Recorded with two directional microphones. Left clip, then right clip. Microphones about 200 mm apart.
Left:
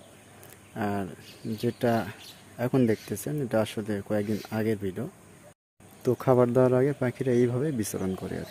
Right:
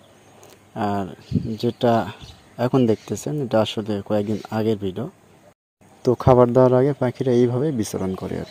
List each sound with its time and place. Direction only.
0.8 s speech: 20° right (ahead or behind)